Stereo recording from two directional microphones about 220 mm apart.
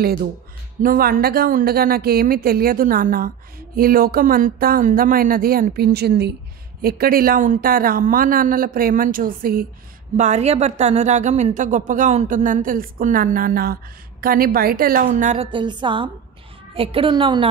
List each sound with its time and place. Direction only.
0.8 s a woman's voice: 40° right (ahead or behind); by 17.5 s 20° right (ahead or behind)